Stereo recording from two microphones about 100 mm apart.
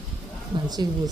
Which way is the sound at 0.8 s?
40° right (ahead or behind).